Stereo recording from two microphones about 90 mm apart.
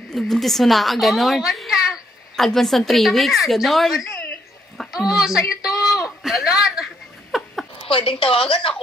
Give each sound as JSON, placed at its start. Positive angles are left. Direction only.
{"t": 0.1, "sound": "a woman's voice", "side_deg": 0}
{"t": 4.7, "sound": "a sound", "side_deg": -5}
{"t": 7.8, "sound": "a woman's voice", "side_deg": 85}